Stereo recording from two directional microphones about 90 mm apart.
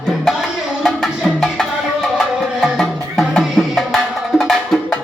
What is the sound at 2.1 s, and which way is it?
Music, 5° left (ahead or behind).